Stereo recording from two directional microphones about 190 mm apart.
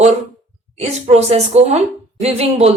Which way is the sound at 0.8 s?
35° right (ahead or behind).